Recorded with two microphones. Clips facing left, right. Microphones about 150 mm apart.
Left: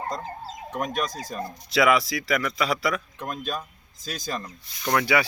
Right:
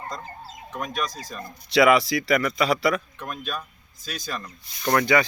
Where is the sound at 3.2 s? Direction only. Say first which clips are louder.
Left 2 dB; 35° left (ahead or behind).